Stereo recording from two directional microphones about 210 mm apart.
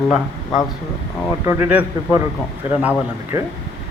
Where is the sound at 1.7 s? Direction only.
5° right (ahead or behind).